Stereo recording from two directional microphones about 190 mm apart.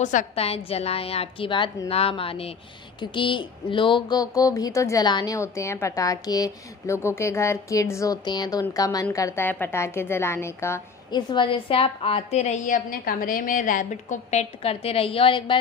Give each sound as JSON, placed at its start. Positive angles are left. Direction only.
{"t": 0.0, "sound": "a woman's voice", "side_deg": 40}